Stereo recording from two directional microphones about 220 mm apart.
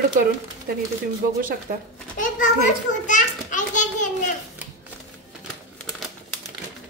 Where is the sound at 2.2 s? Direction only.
35° left (ahead or behind).